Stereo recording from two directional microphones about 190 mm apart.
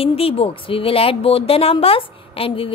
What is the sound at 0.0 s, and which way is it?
A woman's voice, 30° left (ahead or behind).